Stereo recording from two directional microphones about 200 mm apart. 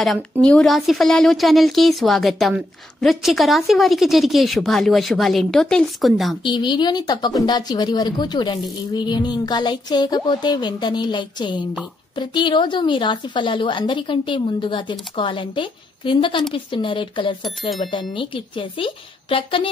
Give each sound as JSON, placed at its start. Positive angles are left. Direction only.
{"t": 0.0, "sound": "a woman's voice", "side_deg": 5}
{"t": 6.4, "sound": "a woman's voice", "side_deg": 25}